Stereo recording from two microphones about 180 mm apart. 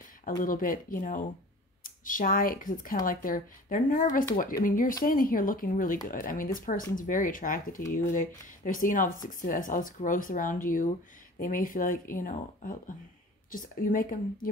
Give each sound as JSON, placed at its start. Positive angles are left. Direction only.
{"t": 0.2, "sound": "speech", "side_deg": 50}